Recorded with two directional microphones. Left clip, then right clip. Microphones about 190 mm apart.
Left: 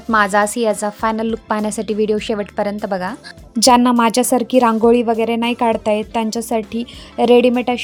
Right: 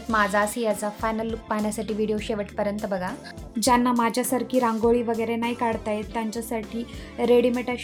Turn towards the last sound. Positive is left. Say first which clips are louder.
# left 8 dB
turn(degrees=50)  # may be behind; listen again after turning